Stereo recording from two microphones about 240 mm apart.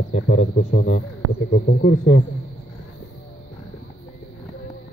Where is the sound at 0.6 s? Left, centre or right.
Left.